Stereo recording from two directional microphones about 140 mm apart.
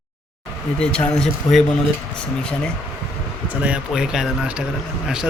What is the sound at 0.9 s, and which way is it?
Speech, 5° left (ahead or behind).